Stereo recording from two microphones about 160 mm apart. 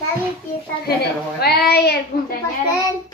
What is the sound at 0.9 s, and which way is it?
A woman's voice, 80° left.